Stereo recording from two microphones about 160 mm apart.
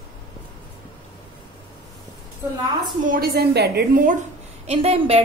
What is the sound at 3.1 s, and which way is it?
Speech, 70° right (ahead or behind).